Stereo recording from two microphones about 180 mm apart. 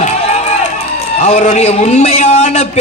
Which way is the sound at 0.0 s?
40° left (ahead or behind).